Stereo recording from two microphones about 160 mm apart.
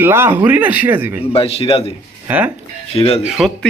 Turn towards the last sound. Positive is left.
turn(degrees=0)  # may be behind; listen again after turning